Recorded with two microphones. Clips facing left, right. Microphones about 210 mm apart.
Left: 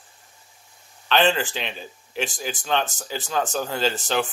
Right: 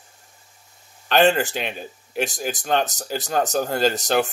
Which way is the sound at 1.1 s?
45° right (ahead or behind).